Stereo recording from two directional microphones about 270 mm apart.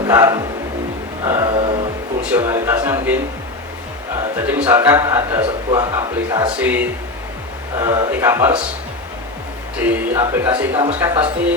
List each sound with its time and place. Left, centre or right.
0.0 s speech: centre
1.2 s mantra: centre
2.3 s speech: centre
4.4 s speech: centre
9.7 s speech: centre